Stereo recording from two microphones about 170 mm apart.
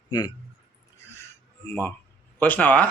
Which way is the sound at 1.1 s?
15° left (ahead or behind).